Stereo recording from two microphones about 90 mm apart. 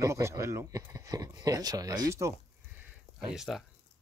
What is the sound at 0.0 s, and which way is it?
Speech, 35° right (ahead or behind).